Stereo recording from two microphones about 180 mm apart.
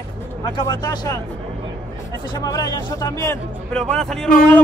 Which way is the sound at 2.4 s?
20° left (ahead or behind).